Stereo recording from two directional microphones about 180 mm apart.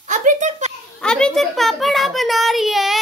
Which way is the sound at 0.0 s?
45° right (ahead or behind).